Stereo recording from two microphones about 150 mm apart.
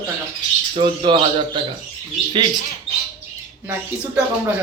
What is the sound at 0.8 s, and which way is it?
Speech, 30° right (ahead or behind).